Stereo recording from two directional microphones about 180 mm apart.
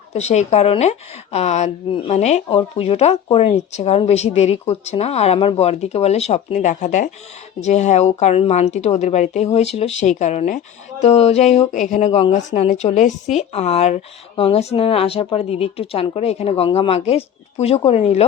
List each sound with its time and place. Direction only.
0.1 s speech: 40° left (ahead or behind)